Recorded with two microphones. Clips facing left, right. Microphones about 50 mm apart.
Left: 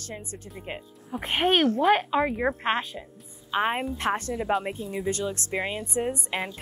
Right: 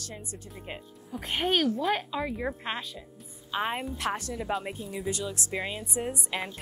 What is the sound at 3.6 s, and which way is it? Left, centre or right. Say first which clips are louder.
Speech: left 5 dB; centre.